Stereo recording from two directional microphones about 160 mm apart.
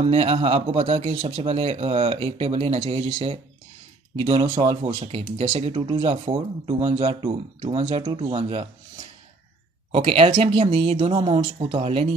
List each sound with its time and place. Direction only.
0.0 s speech: 35° right (ahead or behind)
9.9 s speech: 35° right (ahead or behind)